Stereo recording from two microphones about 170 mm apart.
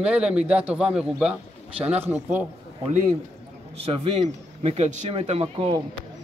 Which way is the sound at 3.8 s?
35° right (ahead or behind).